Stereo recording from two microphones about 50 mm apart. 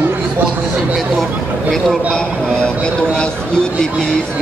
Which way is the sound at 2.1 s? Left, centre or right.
Centre.